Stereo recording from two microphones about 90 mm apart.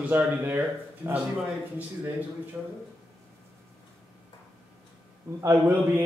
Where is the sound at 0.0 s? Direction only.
20° right (ahead or behind).